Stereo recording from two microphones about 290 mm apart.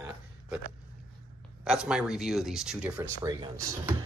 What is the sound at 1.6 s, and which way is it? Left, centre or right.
Speech, centre.